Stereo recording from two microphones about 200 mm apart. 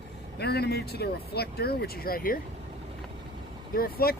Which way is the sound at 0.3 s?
55° left (ahead or behind).